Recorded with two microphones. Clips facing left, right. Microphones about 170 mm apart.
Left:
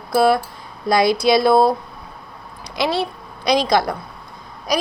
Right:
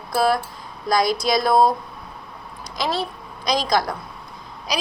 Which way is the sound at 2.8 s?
70° left (ahead or behind).